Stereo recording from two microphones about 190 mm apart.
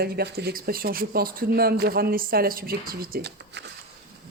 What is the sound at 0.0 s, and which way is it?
Speech, 55° right (ahead or behind).